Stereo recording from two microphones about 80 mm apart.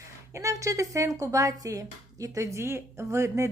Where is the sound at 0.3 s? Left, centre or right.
Right.